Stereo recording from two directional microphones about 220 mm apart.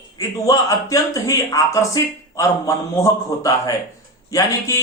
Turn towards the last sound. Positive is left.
turn(degrees=15)  # may be behind; listen again after turning